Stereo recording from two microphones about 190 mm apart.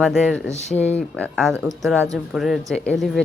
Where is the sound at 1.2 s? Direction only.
5° left (ahead or behind).